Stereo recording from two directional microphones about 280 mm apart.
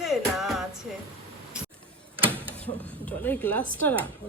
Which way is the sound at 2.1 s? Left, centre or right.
Centre.